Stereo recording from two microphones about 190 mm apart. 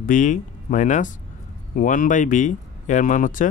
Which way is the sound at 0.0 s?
40° left (ahead or behind).